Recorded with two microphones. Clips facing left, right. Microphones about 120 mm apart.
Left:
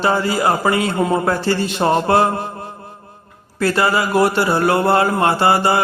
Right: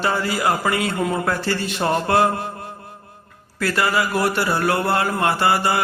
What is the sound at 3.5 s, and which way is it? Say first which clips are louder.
Speech: left 4 dB; 30° left (ahead or behind).